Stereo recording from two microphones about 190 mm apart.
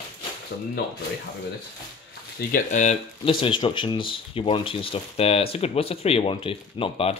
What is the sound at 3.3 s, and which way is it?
Speech, 25° left (ahead or behind).